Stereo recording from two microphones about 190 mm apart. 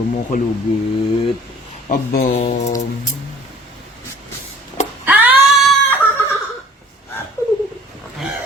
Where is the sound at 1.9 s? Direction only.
50° left (ahead or behind).